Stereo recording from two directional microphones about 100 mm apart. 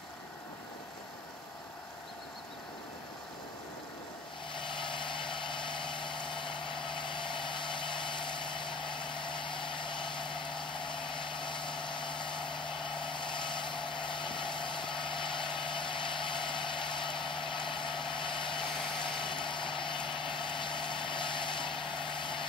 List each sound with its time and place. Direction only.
4.6 s vehicle: 55° left (ahead or behind)